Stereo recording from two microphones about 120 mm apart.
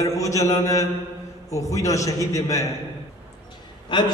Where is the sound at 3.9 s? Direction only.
45° left (ahead or behind).